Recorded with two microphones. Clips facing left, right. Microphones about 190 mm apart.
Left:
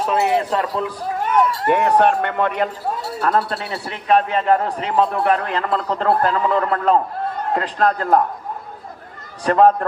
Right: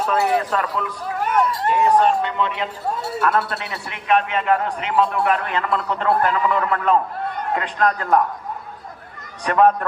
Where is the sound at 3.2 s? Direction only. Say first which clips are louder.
Left 2 dB; 30° left (ahead or behind).